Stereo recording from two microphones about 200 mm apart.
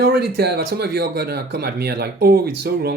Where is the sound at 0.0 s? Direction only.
50° right (ahead or behind).